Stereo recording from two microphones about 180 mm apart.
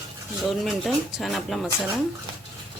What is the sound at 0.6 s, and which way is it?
Speech, centre (ahead or behind).